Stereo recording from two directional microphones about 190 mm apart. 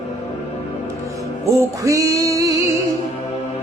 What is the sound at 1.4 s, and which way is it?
Music, 15° right (ahead or behind).